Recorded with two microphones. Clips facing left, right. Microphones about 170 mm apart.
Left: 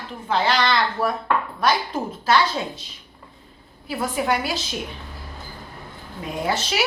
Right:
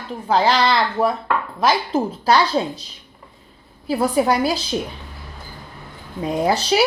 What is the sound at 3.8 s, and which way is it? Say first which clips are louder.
Speech: right 6 dB; 35° right (ahead or behind).